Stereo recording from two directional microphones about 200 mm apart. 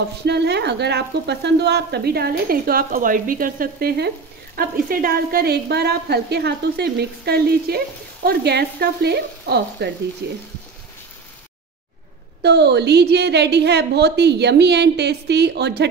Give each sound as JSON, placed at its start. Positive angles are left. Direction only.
{"t": 0.2, "sound": "a woman's voice", "side_deg": -55}
{"t": 12.4, "sound": "a woman's voice", "side_deg": -55}